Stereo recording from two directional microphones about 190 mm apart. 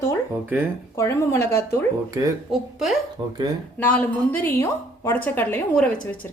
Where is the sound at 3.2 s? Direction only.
20° right (ahead or behind).